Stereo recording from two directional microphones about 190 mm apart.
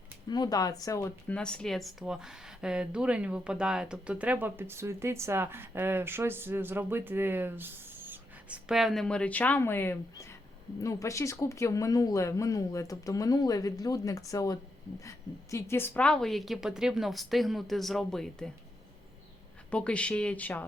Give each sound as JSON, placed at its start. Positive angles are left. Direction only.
{"t": 0.3, "sound": "speech", "side_deg": 20}
{"t": 1.3, "sound": "a woman's voice", "side_deg": 5}
{"t": 19.7, "sound": "speech", "side_deg": 5}